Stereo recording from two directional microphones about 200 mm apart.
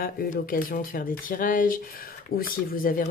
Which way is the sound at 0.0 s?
45° left (ahead or behind).